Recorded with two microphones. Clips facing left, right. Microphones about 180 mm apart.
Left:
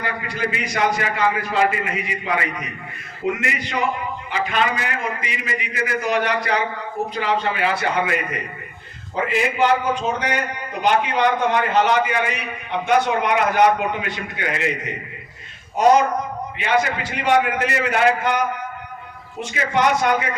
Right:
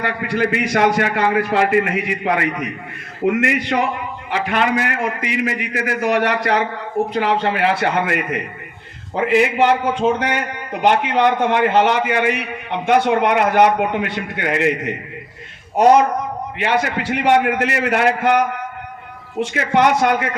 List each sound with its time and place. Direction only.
0.0 s a man's voice: 65° right (ahead or behind)
16.6 s a man's voice: 65° right (ahead or behind)
19.5 s a man's voice: 60° right (ahead or behind)